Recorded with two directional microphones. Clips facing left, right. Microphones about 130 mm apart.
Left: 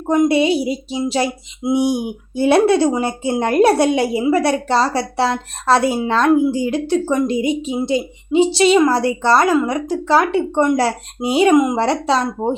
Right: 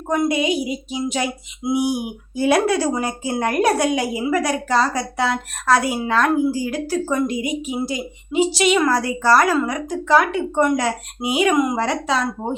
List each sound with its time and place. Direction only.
0.1 s speech: 25° left (ahead or behind)
11.5 s speech: 20° left (ahead or behind)
11.8 s speech: 35° left (ahead or behind)